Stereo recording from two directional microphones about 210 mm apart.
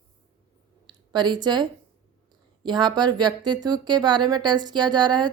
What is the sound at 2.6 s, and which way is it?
Speech, 20° right (ahead or behind).